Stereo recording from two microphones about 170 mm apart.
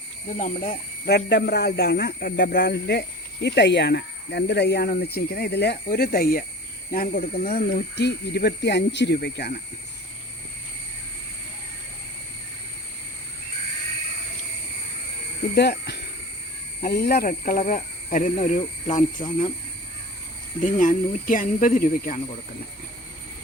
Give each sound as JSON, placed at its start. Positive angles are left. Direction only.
{"t": 0.3, "sound": "speech", "side_deg": 50}
{"t": 3.4, "sound": "speech", "side_deg": 90}
{"t": 15.5, "sound": "speech", "side_deg": 75}
{"t": 16.8, "sound": "speech", "side_deg": 65}
{"t": 20.6, "sound": "speech", "side_deg": 50}